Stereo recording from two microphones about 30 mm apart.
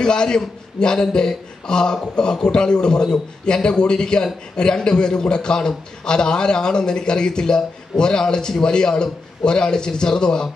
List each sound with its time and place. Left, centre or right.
0.0 s a man's voice: left